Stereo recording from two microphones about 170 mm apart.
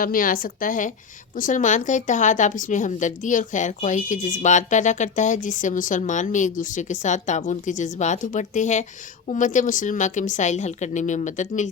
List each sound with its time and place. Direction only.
0.0 s a woman's voice: 55° left (ahead or behind)